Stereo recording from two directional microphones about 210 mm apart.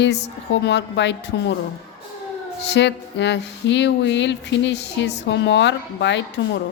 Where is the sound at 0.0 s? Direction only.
55° left (ahead or behind).